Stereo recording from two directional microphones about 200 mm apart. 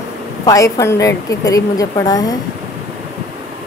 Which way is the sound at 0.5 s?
15° left (ahead or behind).